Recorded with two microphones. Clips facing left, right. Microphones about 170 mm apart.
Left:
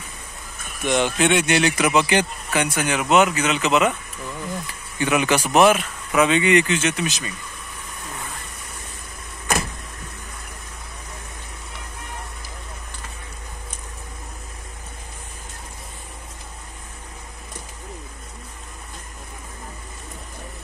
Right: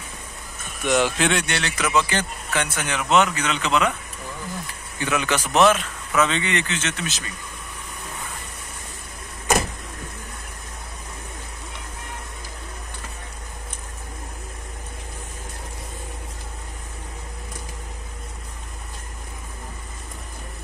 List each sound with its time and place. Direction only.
0.9 s speech: centre (ahead or behind)
1.5 s a man's voice: 15° left (ahead or behind)
5.0 s a man's voice: 15° left (ahead or behind)